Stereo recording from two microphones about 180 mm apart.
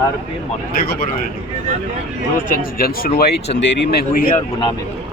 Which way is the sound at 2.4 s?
55° left (ahead or behind).